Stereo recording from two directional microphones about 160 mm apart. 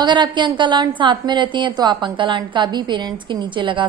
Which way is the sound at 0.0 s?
30° right (ahead or behind).